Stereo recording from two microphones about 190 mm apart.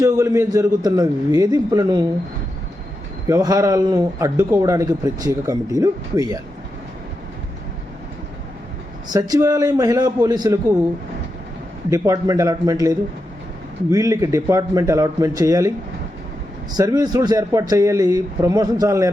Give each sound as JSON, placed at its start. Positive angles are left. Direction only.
{"t": 0.0, "sound": "a man's voice", "side_deg": -20}
{"t": 3.2, "sound": "a man's voice", "side_deg": -20}
{"t": 9.1, "sound": "a man's voice", "side_deg": -20}
{"t": 11.9, "sound": "a man's voice", "side_deg": -20}
{"t": 16.7, "sound": "a man's voice", "side_deg": -20}